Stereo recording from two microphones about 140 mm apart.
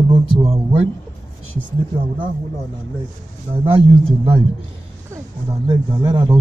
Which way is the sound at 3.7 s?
45° right (ahead or behind).